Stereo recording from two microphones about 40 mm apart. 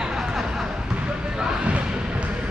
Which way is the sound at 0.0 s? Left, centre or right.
Centre.